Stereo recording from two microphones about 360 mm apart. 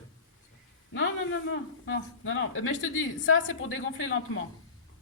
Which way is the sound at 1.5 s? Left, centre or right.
Left.